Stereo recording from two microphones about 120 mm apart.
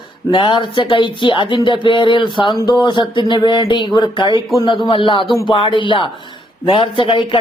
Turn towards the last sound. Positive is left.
turn(degrees=45)  # may be behind; listen again after turning